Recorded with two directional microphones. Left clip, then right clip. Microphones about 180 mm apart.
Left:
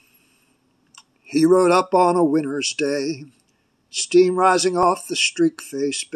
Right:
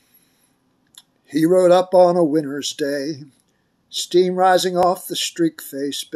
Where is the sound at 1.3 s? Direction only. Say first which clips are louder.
Right 2 dB; 10° right (ahead or behind).